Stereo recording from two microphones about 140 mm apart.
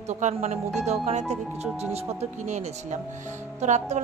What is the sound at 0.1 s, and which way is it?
A woman's voice, 55° right (ahead or behind).